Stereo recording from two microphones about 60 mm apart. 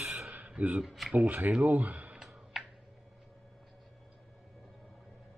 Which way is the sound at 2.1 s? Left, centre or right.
Centre.